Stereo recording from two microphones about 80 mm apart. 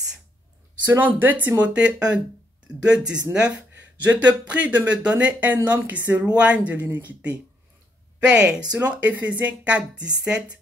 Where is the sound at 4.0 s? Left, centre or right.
Centre.